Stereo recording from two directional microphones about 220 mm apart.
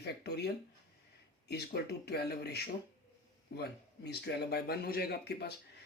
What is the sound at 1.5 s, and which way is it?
Speech, 50° left (ahead or behind).